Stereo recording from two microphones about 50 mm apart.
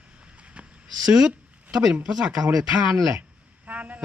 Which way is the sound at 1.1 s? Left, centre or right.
Centre.